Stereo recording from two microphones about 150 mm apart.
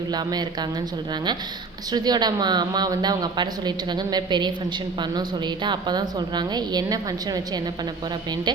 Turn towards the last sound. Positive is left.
turn(degrees=-25)  # may be behind; listen again after turning